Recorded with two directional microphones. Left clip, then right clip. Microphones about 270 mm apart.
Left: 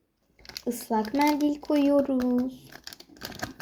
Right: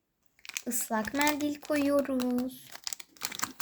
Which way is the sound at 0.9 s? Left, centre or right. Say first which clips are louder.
Left 4 dB; right.